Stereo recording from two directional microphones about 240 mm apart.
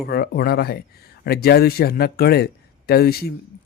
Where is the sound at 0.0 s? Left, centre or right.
Left.